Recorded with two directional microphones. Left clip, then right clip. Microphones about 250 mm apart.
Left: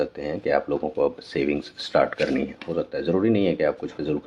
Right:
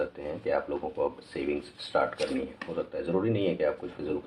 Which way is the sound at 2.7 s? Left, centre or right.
Left.